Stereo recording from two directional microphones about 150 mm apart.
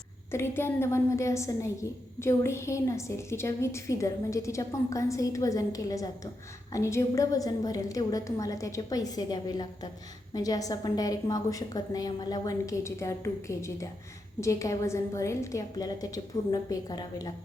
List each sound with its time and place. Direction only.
0.3 s a woman's voice: 15° left (ahead or behind)